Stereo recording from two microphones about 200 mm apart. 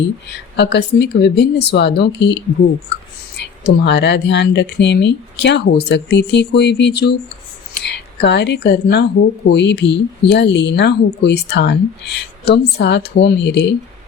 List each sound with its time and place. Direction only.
0.3 s speech: 60° left (ahead or behind)